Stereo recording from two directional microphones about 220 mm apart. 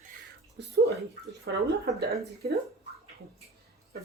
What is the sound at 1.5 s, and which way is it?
Speech, 50° right (ahead or behind).